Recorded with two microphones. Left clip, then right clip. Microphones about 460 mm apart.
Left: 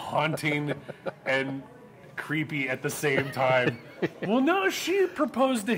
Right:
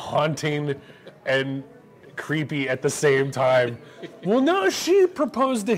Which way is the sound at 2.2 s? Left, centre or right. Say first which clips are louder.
Right 3 dB; right.